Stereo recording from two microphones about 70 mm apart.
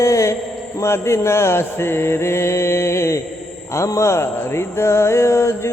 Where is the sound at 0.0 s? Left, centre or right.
Left.